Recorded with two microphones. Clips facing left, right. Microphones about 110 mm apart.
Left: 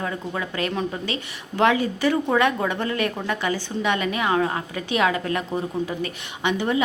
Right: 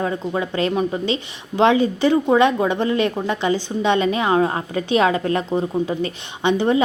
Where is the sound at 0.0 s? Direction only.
30° right (ahead or behind).